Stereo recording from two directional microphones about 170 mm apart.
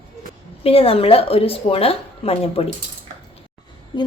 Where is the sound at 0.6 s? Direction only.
35° left (ahead or behind).